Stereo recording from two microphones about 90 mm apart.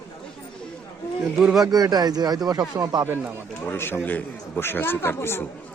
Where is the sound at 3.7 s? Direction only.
25° left (ahead or behind).